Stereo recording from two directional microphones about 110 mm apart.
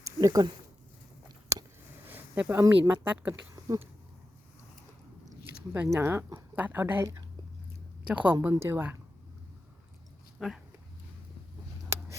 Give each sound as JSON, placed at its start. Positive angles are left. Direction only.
{"t": 0.0, "sound": "speech", "side_deg": -30}
{"t": 2.0, "sound": "speech", "side_deg": -15}
{"t": 3.5, "sound": "a sound", "side_deg": -30}
{"t": 5.7, "sound": "a woman's voice", "side_deg": -20}
{"t": 10.4, "sound": "speech", "side_deg": -5}